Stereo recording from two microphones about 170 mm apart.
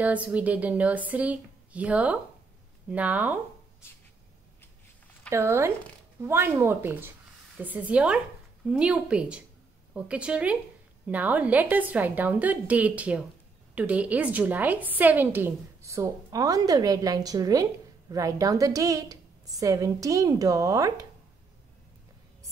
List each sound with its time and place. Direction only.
0.0 s a woman's voice: 10° right (ahead or behind)
5.3 s a woman's voice: 15° right (ahead or behind)